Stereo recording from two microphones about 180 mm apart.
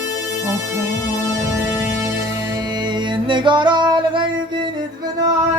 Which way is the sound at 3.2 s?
25° right (ahead or behind).